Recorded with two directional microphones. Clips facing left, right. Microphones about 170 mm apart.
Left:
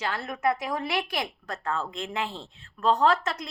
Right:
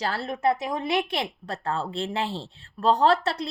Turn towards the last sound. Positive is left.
turn(degrees=-30)  # may be behind; listen again after turning